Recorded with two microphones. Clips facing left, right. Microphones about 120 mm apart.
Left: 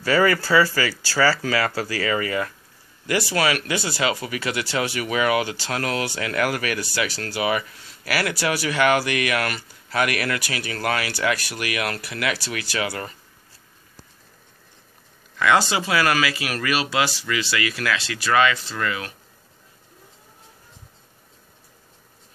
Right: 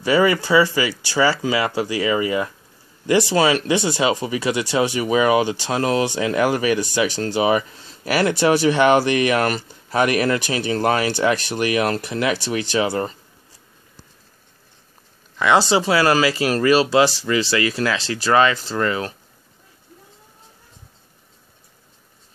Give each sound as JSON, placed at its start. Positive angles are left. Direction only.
{"t": 0.0, "sound": "speech", "side_deg": -15}
{"t": 15.3, "sound": "speech", "side_deg": -25}